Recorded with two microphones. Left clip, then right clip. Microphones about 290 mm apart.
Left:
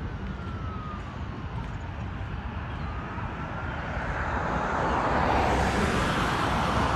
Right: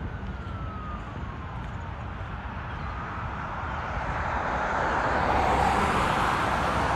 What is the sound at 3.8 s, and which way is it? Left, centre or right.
Vehicle, right.